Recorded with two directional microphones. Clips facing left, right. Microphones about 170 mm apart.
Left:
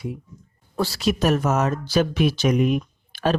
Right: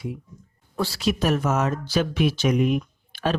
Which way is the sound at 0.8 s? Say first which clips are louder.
Left 2 dB; 40° left (ahead or behind).